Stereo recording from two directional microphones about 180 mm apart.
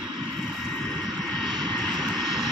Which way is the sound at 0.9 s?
Centre (ahead or behind).